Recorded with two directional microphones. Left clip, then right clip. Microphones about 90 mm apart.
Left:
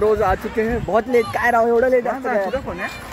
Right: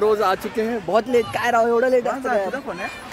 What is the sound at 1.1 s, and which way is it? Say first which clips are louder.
Speech: left 2 dB; 5° right (ahead or behind).